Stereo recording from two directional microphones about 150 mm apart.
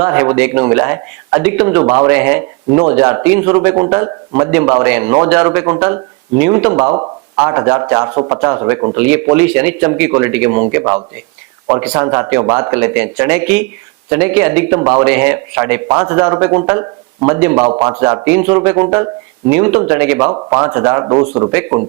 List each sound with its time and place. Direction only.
0.0 s a man's voice: 15° right (ahead or behind)
6.9 s a sound: 30° right (ahead or behind)
7.4 s a man's voice: 15° right (ahead or behind)
20.3 s a man's voice: 25° right (ahead or behind)